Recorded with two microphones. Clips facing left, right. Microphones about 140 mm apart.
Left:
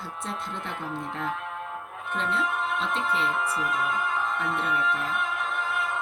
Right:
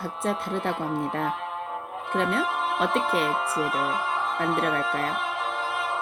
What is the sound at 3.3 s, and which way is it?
Speech, 30° right (ahead or behind).